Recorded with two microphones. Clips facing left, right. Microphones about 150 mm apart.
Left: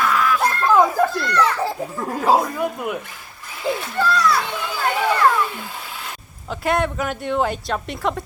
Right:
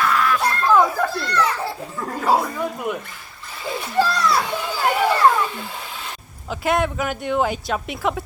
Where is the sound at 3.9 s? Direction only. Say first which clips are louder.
Right 1 dB; 25° right (ahead or behind).